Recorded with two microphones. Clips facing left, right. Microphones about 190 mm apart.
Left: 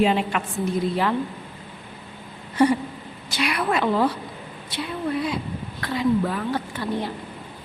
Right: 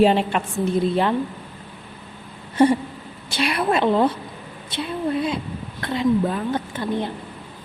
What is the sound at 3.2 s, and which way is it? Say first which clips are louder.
Speech: right 3 dB; 30° right (ahead or behind).